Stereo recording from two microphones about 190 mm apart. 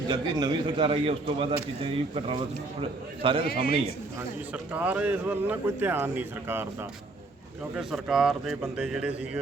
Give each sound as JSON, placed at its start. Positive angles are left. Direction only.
{"t": 0.1, "sound": "a man's voice", "side_deg": -20}
{"t": 3.4, "sound": "a man's voice", "side_deg": 55}
{"t": 4.5, "sound": "speech", "side_deg": -10}
{"t": 7.8, "sound": "speech", "side_deg": 0}